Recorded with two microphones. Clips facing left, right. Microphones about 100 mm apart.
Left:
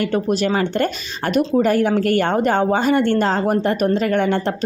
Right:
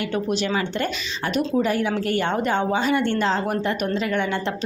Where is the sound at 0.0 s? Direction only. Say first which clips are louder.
Left 5 dB; 45° left (ahead or behind).